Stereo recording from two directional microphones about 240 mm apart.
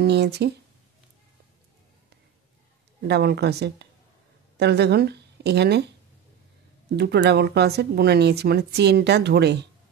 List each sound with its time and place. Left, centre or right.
0.0 s speech: right
3.0 s a woman's voice: right
7.0 s speech: right